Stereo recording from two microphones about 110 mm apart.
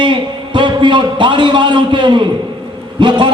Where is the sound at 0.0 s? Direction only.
45° right (ahead or behind).